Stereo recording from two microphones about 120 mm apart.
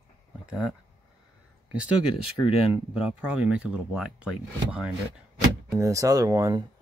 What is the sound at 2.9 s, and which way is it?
Speech, 5° right (ahead or behind).